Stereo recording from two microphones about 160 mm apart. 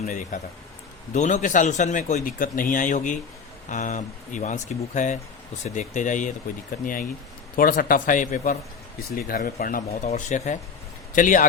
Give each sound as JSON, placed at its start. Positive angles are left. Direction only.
{"t": 0.3, "sound": "a man's voice", "side_deg": 50}
{"t": 6.8, "sound": "a man's voice", "side_deg": 60}